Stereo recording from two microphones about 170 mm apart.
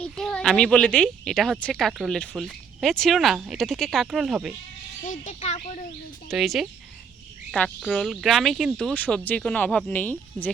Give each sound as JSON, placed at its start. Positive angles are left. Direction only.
{"t": 0.0, "sound": "a woman's voice", "side_deg": 5}
{"t": 5.0, "sound": "speech", "side_deg": 45}
{"t": 6.2, "sound": "a woman's voice", "side_deg": 0}